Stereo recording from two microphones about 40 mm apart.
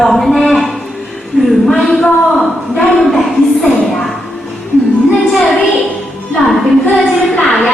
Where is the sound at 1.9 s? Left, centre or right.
Centre.